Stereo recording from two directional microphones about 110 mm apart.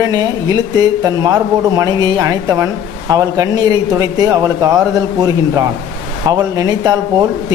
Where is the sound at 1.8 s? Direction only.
35° right (ahead or behind).